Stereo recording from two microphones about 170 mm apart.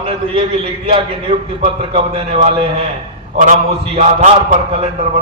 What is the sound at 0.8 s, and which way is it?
A man's voice, 35° right (ahead or behind).